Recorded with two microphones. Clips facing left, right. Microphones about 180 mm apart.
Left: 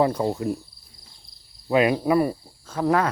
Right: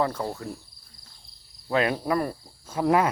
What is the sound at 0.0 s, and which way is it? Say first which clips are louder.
Cricket: left 6 dB; 20° left (ahead or behind).